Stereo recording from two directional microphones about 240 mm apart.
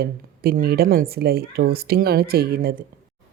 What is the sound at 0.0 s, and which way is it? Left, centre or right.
A woman's voice, right.